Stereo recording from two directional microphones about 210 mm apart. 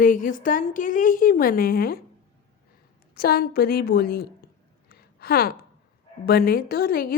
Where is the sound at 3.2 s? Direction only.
45° left (ahead or behind).